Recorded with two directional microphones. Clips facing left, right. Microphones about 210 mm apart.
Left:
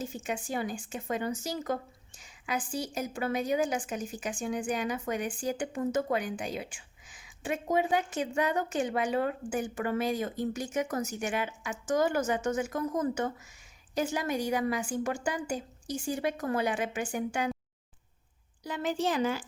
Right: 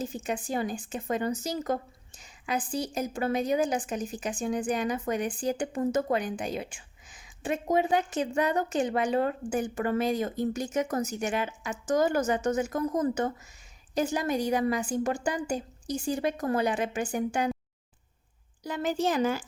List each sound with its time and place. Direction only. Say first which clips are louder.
0.2 s a woman's voice: right 2 dB; 40° right (ahead or behind)
18.6 s speech: right 2 dB; 45° right (ahead or behind)